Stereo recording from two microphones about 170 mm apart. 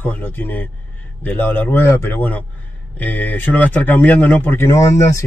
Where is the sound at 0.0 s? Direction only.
10° left (ahead or behind).